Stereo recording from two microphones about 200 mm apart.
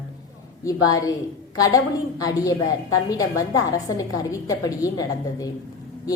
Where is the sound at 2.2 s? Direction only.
20° left (ahead or behind).